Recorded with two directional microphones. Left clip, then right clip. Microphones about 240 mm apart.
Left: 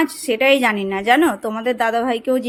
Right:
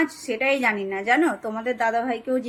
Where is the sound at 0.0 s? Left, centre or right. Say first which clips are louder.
Left 7 dB; left.